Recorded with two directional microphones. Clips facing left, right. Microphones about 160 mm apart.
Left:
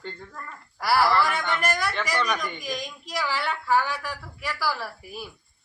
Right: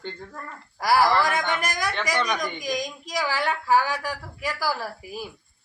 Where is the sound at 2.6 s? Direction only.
45° right (ahead or behind).